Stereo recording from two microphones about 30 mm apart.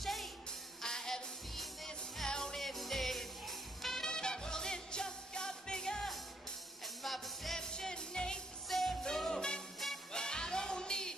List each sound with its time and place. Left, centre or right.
0.0 s music: centre
0.8 s music: centre
2.2 s music: left
2.6 s music: centre
4.0 s music: left
7.0 s music: centre
7.5 s music: centre
8.6 s music: centre
9.2 s music: left